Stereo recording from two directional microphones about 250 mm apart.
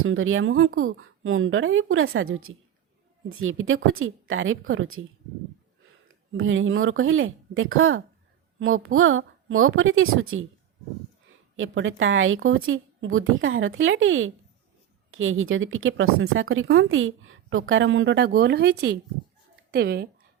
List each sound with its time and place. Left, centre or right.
0.0 s speech: right
6.3 s speech: right
11.5 s speech: right